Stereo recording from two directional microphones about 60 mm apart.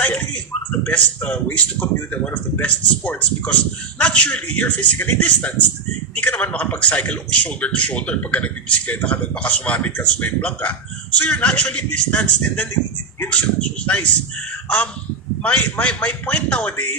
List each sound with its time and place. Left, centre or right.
0.0 s a sound: left
0.7 s speech: left
13.1 s speech: left
13.6 s speech: centre
15.4 s speech: left